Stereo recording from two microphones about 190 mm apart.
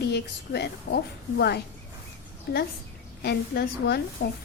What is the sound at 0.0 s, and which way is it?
A woman's voice, 60° left (ahead or behind).